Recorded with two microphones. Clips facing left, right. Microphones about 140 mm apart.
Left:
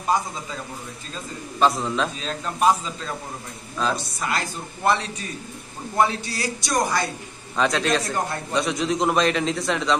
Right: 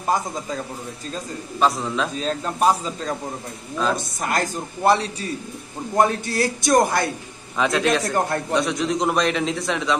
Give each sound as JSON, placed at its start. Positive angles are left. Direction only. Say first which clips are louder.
{"t": 0.1, "sound": "a man's voice", "louder": "even", "side_deg": -50}
{"t": 1.6, "sound": "a man's voice", "louder": "even", "side_deg": 0}
{"t": 2.1, "sound": "speech", "louder": "right 4 dB", "side_deg": -35}
{"t": 3.9, "sound": "a man's voice", "louder": "right 3 dB", "side_deg": -45}
{"t": 5.9, "sound": "a man's voice", "louder": "right 3 dB", "side_deg": -50}
{"t": 7.5, "sound": "a man's voice", "louder": "right 1 dB", "side_deg": -5}
{"t": 8.1, "sound": "a man's voice", "louder": "right 4 dB", "side_deg": -55}
{"t": 8.5, "sound": "a man's voice", "louder": "even", "side_deg": 0}